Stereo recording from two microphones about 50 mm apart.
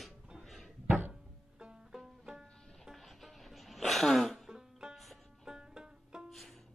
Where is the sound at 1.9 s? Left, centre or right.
Centre.